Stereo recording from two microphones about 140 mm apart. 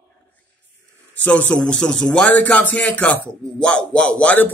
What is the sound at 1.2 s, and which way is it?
Speech, 10° left (ahead or behind).